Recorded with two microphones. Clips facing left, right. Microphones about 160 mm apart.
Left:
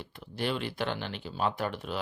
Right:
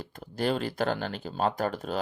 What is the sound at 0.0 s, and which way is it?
Speech, 40° right (ahead or behind).